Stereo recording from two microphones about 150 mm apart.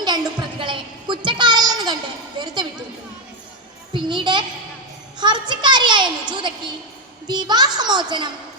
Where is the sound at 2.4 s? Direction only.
25° right (ahead or behind).